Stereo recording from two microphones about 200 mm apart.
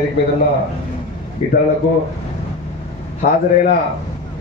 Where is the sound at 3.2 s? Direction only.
45° left (ahead or behind).